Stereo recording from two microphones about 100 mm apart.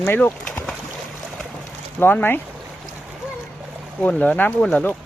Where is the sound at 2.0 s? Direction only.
20° left (ahead or behind).